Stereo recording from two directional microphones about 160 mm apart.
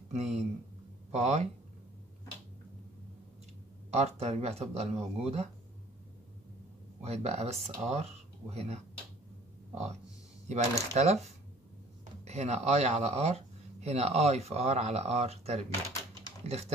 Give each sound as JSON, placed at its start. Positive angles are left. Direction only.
{"t": 0.1, "sound": "speech", "side_deg": -45}
{"t": 3.9, "sound": "speech", "side_deg": -40}
{"t": 7.0, "sound": "speech", "side_deg": -40}
{"t": 10.5, "sound": "speech", "side_deg": -45}